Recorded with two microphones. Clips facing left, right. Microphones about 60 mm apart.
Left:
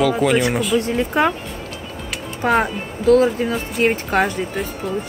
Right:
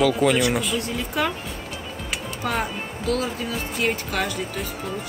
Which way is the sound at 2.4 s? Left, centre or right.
Left.